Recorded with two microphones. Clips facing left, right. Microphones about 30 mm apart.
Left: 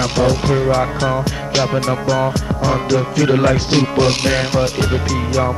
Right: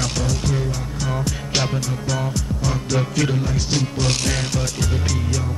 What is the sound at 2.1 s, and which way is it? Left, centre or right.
Music, left.